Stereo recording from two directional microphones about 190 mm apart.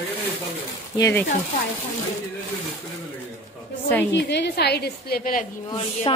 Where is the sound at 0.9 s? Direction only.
15° left (ahead or behind).